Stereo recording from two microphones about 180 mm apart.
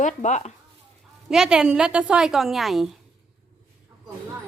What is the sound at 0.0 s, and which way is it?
Speech, 40° left (ahead or behind).